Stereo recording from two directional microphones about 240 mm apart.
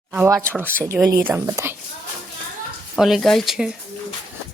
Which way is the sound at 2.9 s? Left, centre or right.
Centre.